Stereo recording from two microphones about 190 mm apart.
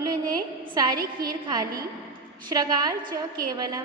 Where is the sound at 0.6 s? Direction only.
20° right (ahead or behind).